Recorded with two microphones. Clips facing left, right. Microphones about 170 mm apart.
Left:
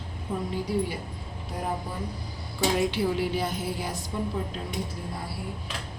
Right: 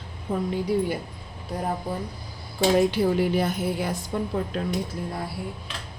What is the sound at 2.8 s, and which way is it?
A woman's voice, 45° right (ahead or behind).